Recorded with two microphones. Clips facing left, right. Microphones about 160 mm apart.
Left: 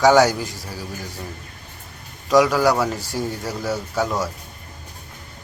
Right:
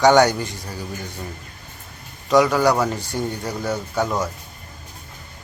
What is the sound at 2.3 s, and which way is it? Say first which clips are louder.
A man's voice: even; centre (ahead or behind).